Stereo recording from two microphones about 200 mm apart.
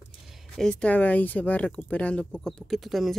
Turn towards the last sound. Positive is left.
turn(degrees=0)  # may be behind; listen again after turning